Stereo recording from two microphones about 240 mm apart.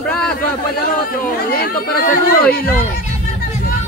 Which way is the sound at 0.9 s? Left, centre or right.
Left.